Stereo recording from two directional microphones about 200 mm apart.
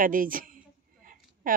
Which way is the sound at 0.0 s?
45° right (ahead or behind).